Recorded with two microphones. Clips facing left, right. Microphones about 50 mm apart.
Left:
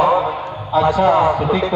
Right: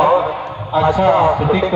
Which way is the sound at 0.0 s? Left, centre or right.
Right.